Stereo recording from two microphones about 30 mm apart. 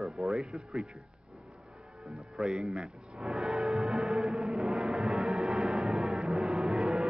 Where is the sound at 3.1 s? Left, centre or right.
Centre.